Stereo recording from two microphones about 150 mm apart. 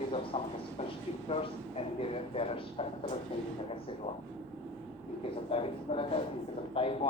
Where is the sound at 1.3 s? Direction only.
40° left (ahead or behind).